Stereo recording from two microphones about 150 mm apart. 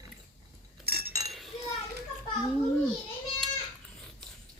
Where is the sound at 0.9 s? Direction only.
90° right.